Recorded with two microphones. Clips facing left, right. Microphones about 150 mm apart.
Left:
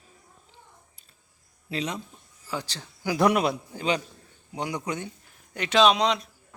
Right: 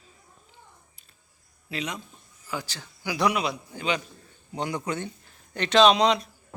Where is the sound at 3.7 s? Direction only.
35° left (ahead or behind).